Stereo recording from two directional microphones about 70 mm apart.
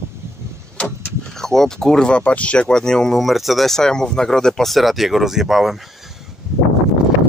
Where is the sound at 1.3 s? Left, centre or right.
Centre.